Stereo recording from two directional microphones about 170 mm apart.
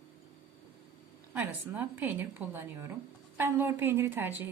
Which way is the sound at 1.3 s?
10° right (ahead or behind).